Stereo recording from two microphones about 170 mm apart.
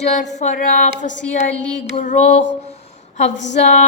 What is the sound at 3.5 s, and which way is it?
Speech, 45° left (ahead or behind).